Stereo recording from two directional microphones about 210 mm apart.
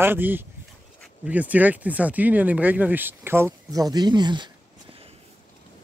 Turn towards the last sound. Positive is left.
turn(degrees=-20)  # may be behind; listen again after turning